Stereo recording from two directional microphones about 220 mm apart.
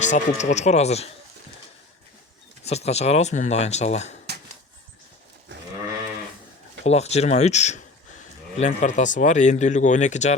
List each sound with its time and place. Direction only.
0.0 s speech: 35° left (ahead or behind)
2.6 s speech: 30° left (ahead or behind)
6.8 s speech: 30° left (ahead or behind)